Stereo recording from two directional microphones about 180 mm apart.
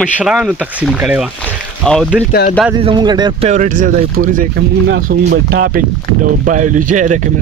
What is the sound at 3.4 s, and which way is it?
Speech, 45° right (ahead or behind).